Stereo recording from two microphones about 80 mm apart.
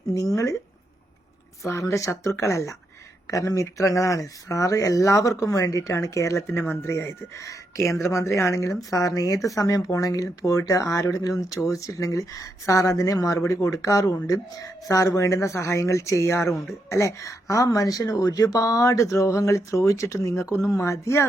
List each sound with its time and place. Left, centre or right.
0.1 s speech: left
1.6 s speech: left